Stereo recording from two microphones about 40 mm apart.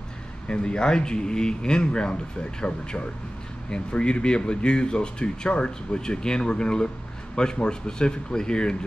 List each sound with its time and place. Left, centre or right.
0.5 s speech: left